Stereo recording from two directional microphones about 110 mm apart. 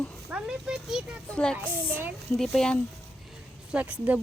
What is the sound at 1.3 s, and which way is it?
Speech, 10° left (ahead or behind).